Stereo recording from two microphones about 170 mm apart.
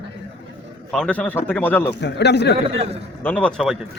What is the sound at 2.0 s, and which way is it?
Speech, 85° left.